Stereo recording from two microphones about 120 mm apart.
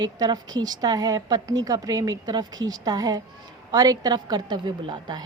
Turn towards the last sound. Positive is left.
turn(degrees=-40)  # may be behind; listen again after turning